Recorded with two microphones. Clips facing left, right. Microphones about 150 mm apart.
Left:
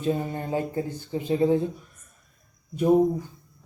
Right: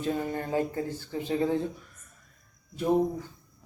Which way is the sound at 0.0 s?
20° left (ahead or behind).